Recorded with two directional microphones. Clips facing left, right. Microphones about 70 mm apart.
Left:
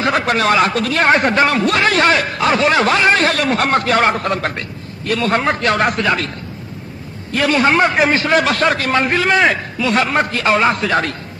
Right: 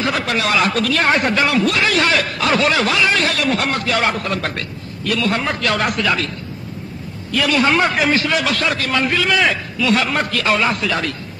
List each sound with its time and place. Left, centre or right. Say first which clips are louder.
0.0 s a man's voice: left 4 dB; left